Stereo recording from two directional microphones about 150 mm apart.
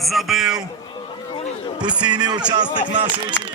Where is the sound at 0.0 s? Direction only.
Centre (ahead or behind).